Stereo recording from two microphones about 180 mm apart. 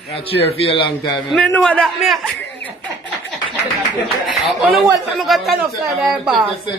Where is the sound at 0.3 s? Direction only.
35° left (ahead or behind).